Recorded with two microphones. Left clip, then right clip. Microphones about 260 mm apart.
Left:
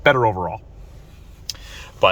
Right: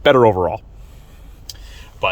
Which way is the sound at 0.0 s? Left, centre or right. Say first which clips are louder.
Right 4 dB; right.